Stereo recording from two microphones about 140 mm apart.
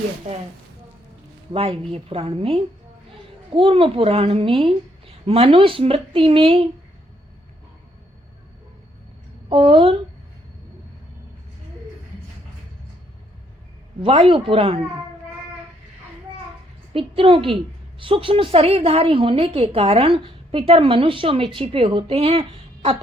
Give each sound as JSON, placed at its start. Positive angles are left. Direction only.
{"t": 0.3, "sound": "a woman's voice", "side_deg": -50}
{"t": 1.5, "sound": "a woman's voice", "side_deg": -45}
{"t": 9.5, "sound": "a woman's voice", "side_deg": -40}
{"t": 14.0, "sound": "a woman's voice", "side_deg": -40}
{"t": 16.9, "sound": "a woman's voice", "side_deg": -40}